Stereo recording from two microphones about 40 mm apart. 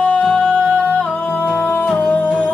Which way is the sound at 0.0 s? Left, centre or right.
Left.